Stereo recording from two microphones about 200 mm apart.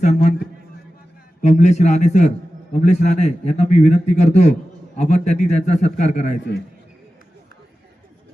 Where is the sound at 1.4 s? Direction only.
35° left (ahead or behind).